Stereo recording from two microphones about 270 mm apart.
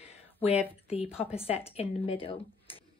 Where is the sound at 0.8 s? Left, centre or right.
Left.